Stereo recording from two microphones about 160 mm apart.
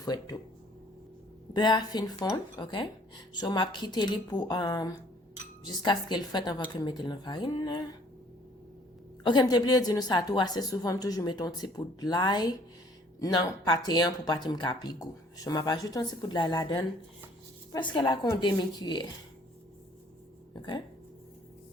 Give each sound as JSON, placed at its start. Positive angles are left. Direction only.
{"t": 0.0, "sound": "speech", "side_deg": 25}
{"t": 1.5, "sound": "speech", "side_deg": 25}
{"t": 9.2, "sound": "speech", "side_deg": 25}
{"t": 20.6, "sound": "speech", "side_deg": 30}